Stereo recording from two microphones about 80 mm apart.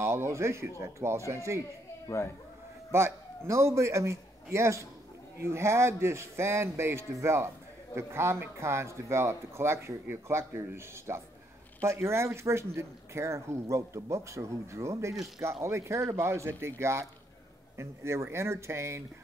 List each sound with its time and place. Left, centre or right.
0.0 s speech: right
2.0 s speech: left
2.9 s a man's voice: right